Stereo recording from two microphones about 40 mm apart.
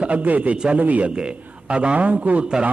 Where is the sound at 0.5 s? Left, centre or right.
Right.